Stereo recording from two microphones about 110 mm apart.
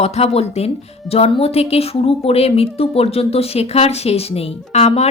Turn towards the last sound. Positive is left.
turn(degrees=80)